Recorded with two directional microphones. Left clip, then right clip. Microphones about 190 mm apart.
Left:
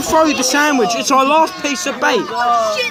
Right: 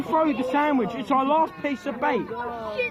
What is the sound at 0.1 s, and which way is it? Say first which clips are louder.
Speech: left 9 dB; 15° left (ahead or behind).